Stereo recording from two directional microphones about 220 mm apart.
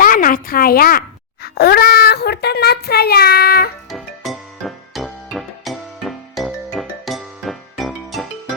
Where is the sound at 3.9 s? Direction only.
Centre (ahead or behind).